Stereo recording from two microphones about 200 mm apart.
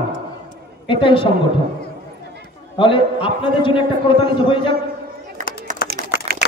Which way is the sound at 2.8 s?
25° left (ahead or behind).